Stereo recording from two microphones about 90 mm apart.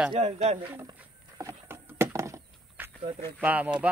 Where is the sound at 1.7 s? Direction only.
30° right (ahead or behind).